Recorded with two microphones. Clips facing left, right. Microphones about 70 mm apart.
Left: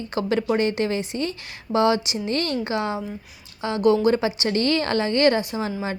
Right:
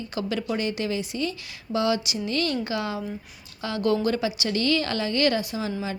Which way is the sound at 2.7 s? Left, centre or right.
Left.